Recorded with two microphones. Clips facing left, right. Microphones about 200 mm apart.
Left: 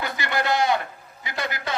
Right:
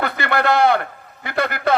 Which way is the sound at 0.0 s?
60° right (ahead or behind).